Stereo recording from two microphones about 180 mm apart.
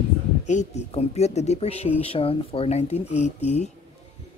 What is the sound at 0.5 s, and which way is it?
Speech, 40° left (ahead or behind).